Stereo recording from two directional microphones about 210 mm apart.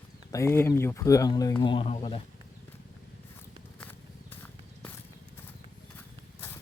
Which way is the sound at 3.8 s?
10° left (ahead or behind).